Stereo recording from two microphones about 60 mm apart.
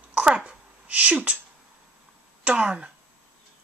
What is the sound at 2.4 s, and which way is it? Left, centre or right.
Speech, right.